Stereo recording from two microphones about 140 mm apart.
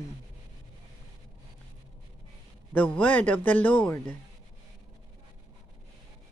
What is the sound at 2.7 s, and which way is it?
A man's voice, 10° left (ahead or behind).